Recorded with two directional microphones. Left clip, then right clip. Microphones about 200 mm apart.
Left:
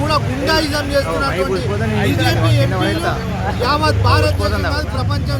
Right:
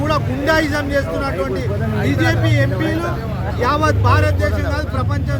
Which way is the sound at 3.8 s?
Centre (ahead or behind).